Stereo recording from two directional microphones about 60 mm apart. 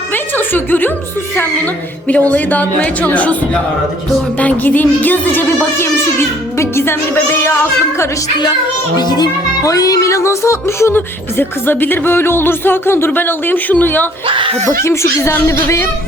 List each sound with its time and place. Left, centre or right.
0.1 s music: left
1.4 s speech: left
4.4 s music: left
9.6 s music: left
10.1 s music: left
14.7 s speech: left